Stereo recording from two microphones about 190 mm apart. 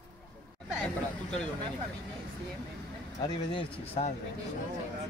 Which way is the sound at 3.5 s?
30° left (ahead or behind).